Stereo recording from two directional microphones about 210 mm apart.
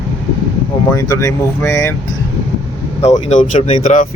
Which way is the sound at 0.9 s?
15° left (ahead or behind).